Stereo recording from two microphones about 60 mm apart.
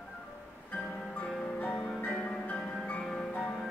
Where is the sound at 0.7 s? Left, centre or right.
Centre.